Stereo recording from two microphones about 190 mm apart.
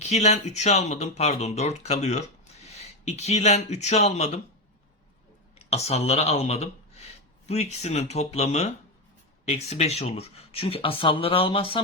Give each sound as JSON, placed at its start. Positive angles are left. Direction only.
{"t": 0.0, "sound": "speech", "side_deg": 35}
{"t": 5.5, "sound": "speech", "side_deg": 35}